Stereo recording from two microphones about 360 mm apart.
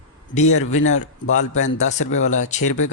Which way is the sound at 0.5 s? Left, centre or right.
Left.